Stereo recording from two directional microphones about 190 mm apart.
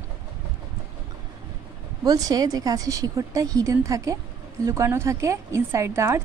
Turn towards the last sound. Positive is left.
turn(degrees=-15)  # may be behind; listen again after turning